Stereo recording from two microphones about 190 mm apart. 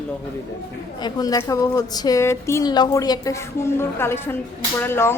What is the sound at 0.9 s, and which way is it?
A woman's voice, 20° left (ahead or behind).